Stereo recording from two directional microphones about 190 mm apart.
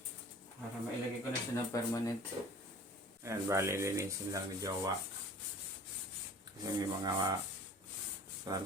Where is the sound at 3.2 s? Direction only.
15° right (ahead or behind).